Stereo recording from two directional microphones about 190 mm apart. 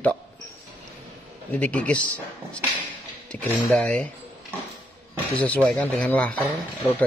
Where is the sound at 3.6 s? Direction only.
5° left (ahead or behind).